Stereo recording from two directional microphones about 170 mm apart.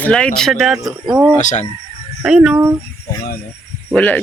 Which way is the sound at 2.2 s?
5° right (ahead or behind).